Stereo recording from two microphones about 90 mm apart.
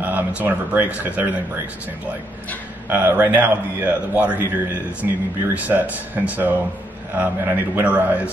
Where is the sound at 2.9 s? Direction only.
20° right (ahead or behind).